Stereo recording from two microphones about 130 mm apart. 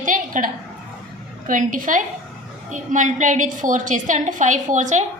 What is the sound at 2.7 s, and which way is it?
A woman's voice, 70° right (ahead or behind).